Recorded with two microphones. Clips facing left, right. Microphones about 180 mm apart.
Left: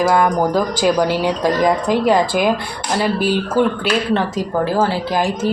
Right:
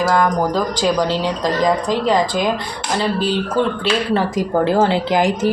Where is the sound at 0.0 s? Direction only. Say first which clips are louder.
Left 1 dB; 10° left (ahead or behind).